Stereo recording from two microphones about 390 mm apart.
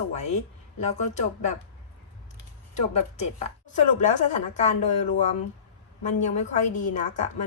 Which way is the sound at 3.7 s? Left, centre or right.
Centre.